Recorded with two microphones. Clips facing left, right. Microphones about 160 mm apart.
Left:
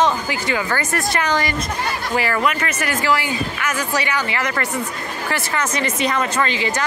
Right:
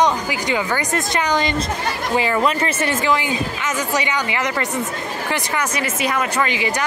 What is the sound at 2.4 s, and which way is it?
Speech, 30° right (ahead or behind).